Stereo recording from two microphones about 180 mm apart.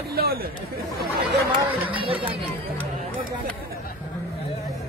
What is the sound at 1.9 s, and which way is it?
Speech, 30° right (ahead or behind).